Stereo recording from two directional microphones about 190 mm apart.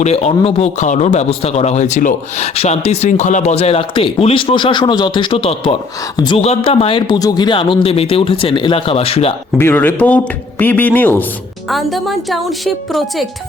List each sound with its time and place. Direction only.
0.0 s a man's voice: 35° left (ahead or behind)
9.6 s a woman's voice: 10° left (ahead or behind)